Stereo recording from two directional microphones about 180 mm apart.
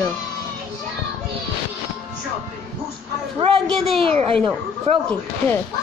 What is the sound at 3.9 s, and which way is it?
Speech, 30° right (ahead or behind).